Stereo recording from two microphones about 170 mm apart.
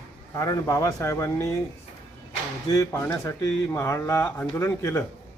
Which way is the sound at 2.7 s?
15° left (ahead or behind).